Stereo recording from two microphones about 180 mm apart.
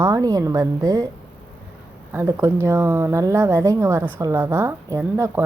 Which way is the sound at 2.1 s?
15° right (ahead or behind).